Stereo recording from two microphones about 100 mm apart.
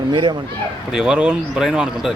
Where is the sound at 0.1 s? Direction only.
50° right (ahead or behind).